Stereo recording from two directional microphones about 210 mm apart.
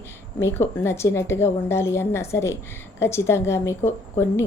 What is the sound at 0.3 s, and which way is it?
A woman's voice, 10° left (ahead or behind).